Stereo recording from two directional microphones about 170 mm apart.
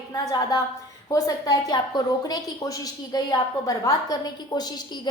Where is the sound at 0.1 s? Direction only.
20° left (ahead or behind).